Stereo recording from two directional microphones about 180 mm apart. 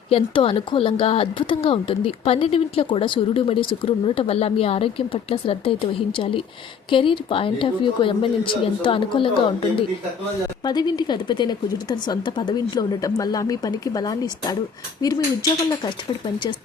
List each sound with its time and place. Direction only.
0.1 s a woman's voice: 30° left (ahead or behind)